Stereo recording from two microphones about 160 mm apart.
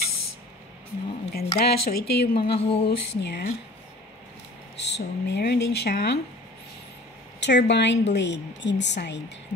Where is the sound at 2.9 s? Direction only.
85° left.